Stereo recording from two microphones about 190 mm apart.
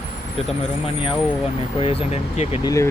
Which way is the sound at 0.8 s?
25° left (ahead or behind).